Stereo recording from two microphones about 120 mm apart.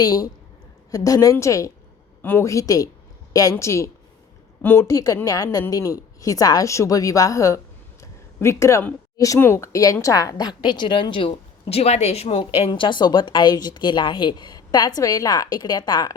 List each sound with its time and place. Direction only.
0.0 s a woman's voice: 35° left (ahead or behind)
8.0 s a sound: 25° left (ahead or behind)
9.1 s a woman's voice: 25° left (ahead or behind)